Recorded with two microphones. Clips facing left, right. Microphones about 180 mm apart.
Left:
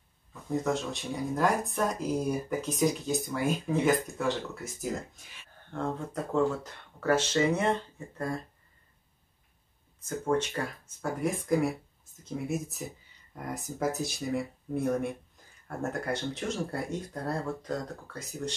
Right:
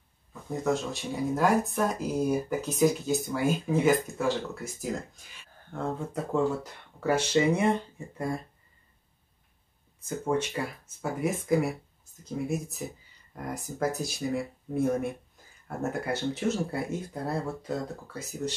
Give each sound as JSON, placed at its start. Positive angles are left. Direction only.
{"t": 0.3, "sound": "speech", "side_deg": 0}
{"t": 5.7, "sound": "speech", "side_deg": -5}
{"t": 9.9, "sound": "speech", "side_deg": -10}